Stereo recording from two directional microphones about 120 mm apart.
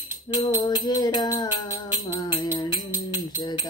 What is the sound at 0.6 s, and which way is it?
Mantra, 35° left (ahead or behind).